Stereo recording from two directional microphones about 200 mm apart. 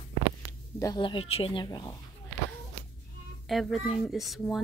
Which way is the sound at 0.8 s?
20° left (ahead or behind).